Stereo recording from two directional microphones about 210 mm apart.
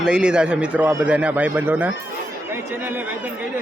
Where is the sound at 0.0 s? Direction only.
5° right (ahead or behind).